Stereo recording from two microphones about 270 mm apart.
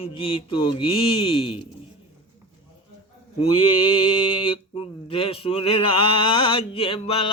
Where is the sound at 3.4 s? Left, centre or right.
Centre.